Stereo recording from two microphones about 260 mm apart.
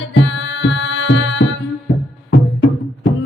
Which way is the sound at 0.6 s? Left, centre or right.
Left.